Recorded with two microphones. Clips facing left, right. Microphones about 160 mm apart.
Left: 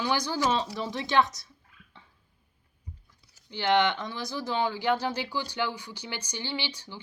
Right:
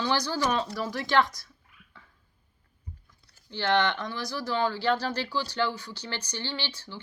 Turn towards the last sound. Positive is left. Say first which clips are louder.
# left 1 dB
turn(degrees=15)  # may be behind; listen again after turning